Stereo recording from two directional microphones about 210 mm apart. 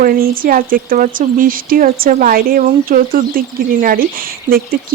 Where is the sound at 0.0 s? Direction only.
45° right (ahead or behind).